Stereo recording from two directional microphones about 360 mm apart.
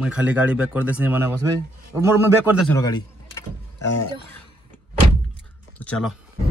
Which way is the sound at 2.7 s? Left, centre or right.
Centre.